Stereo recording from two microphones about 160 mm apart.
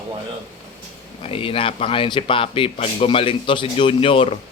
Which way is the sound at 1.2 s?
35° left (ahead or behind).